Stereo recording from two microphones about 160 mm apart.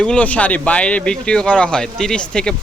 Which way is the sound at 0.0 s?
5° left (ahead or behind).